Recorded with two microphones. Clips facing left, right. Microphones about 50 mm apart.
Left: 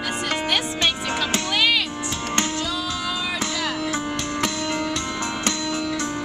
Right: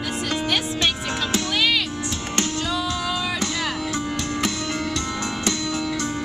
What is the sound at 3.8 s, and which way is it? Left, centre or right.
Music, centre.